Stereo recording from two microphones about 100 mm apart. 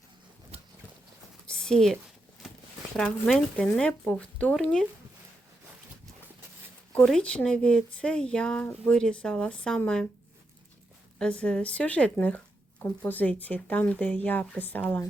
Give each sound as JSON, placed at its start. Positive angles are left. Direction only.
{"t": 1.5, "sound": "a woman's voice", "side_deg": 5}
{"t": 6.9, "sound": "speech", "side_deg": 10}
{"t": 11.2, "sound": "speech", "side_deg": 10}